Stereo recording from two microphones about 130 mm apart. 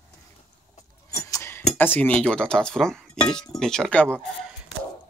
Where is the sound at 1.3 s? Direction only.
20° left (ahead or behind).